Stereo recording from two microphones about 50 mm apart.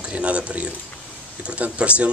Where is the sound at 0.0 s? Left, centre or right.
Right.